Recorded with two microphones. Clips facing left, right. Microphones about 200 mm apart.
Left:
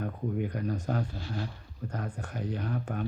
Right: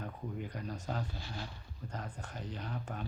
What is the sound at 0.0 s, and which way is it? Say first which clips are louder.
Speech: left 9 dB; 60° left (ahead or behind).